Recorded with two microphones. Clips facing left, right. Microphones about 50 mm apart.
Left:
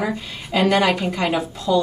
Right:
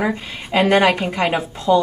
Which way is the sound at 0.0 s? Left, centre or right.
Right.